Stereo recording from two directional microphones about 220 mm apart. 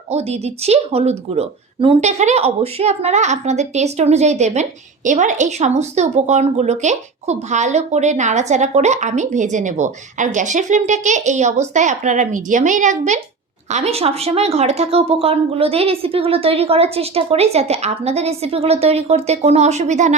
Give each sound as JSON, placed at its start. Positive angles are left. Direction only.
{"t": 0.1, "sound": "a woman's voice", "side_deg": -30}